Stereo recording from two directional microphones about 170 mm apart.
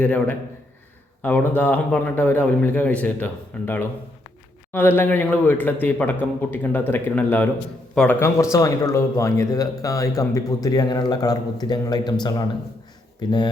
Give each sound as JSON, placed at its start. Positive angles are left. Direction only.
{"t": 0.0, "sound": "a man's voice", "side_deg": 10}
{"t": 4.7, "sound": "a man's voice", "side_deg": 10}
{"t": 13.1, "sound": "speech", "side_deg": 25}